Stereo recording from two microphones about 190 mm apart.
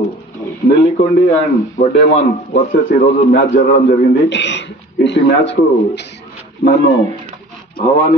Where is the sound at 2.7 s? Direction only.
60° left (ahead or behind).